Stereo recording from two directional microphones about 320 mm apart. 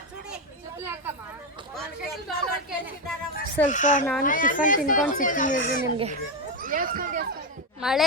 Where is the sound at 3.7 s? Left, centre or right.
Left.